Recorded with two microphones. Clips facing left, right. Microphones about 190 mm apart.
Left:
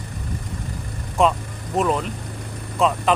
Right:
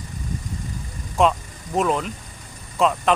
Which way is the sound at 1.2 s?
Centre (ahead or behind).